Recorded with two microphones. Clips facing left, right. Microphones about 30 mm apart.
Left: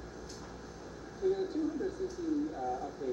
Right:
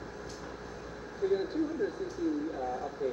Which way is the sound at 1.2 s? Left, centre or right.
Right.